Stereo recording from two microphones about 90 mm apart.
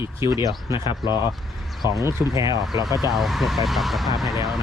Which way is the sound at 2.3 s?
40° right (ahead or behind).